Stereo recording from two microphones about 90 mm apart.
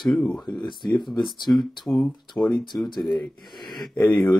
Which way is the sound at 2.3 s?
20° left (ahead or behind).